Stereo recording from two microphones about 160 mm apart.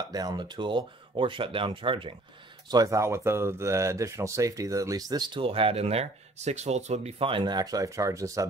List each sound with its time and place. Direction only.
0.1 s speech: 25° right (ahead or behind)
2.7 s speech: 20° right (ahead or behind)